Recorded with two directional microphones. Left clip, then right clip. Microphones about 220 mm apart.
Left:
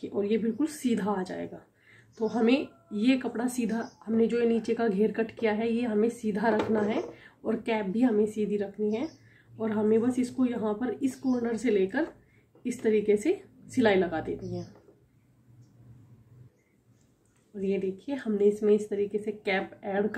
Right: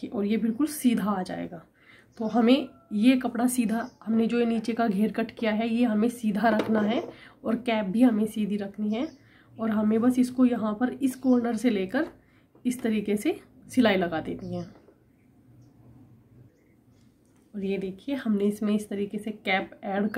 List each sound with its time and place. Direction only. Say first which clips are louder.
0.2 s a woman's voice: even; 45° right (ahead or behind)
17.6 s a woman's voice: left 1 dB; 45° right (ahead or behind)